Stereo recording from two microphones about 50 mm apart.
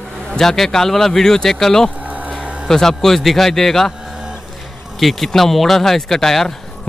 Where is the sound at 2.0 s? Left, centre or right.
Right.